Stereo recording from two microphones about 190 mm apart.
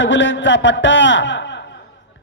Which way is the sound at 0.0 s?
75° left (ahead or behind).